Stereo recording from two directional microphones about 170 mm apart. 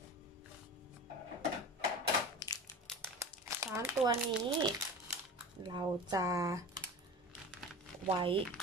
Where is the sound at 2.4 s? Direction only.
20° left (ahead or behind).